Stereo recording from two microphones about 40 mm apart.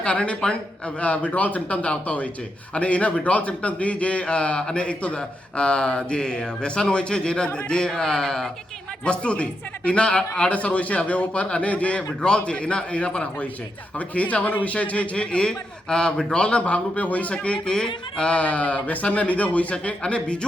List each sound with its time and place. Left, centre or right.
0.0 s a man's voice: left
1.3 s a man's voice: left; by 8.4 s centre
9.0 s a man's voice: left
10.5 s a man's voice: left